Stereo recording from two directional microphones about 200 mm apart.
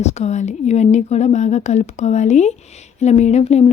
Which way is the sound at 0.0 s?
35° left (ahead or behind).